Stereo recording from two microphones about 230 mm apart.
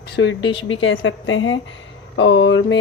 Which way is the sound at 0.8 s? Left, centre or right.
Left.